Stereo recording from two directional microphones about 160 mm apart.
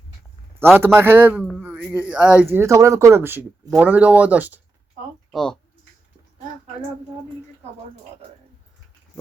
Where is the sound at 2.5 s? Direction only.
20° right (ahead or behind).